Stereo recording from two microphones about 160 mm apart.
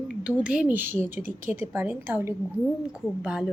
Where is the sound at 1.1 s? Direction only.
55° right (ahead or behind).